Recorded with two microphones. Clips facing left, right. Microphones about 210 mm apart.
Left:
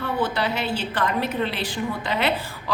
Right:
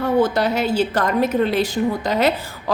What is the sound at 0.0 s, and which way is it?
A woman's voice, 45° right (ahead or behind).